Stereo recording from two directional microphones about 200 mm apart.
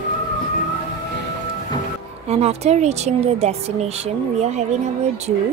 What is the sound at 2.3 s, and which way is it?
Speech, 35° right (ahead or behind).